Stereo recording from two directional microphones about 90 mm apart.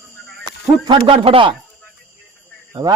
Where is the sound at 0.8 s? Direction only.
60° right (ahead or behind).